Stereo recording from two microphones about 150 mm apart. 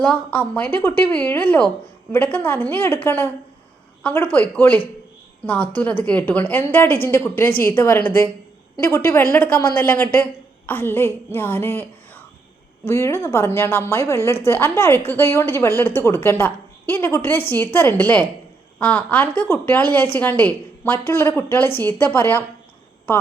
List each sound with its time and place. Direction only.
0.0 s a woman's voice: 5° left (ahead or behind)